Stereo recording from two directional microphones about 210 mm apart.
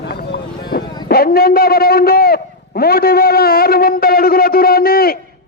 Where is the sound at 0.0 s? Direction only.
50° left (ahead or behind).